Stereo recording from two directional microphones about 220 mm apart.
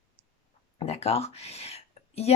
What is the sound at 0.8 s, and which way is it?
Speech, 30° left (ahead or behind).